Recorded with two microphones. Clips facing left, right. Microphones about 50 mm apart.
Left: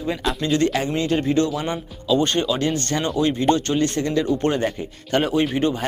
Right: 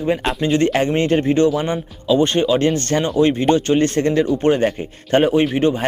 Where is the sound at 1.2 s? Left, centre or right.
Right.